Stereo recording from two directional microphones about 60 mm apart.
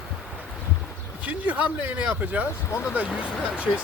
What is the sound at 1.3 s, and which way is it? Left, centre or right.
A man's voice, right.